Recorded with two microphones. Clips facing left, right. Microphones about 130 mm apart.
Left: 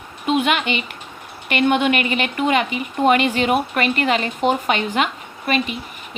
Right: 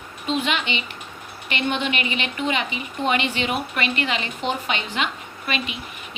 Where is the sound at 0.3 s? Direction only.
55° left (ahead or behind).